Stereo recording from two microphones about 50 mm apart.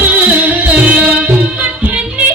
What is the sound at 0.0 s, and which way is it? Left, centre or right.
Music, right.